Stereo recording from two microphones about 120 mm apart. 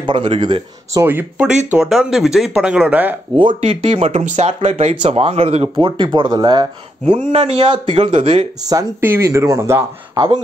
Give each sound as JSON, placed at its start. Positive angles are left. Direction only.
{"t": 0.0, "sound": "speech", "side_deg": -45}
{"t": 1.0, "sound": "speech", "side_deg": -15}
{"t": 3.6, "sound": "speech", "side_deg": -65}
{"t": 4.6, "sound": "speech", "side_deg": -70}
{"t": 5.0, "sound": "speech", "side_deg": -60}
{"t": 5.8, "sound": "speech", "side_deg": -40}
{"t": 7.1, "sound": "speech", "side_deg": -70}
{"t": 9.0, "sound": "speech", "side_deg": -20}
{"t": 10.1, "sound": "speech", "side_deg": -35}